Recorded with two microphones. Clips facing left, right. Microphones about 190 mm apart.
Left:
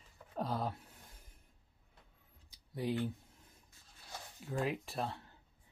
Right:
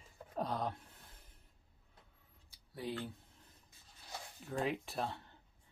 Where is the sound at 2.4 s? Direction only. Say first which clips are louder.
Left 5 dB; 15° left (ahead or behind).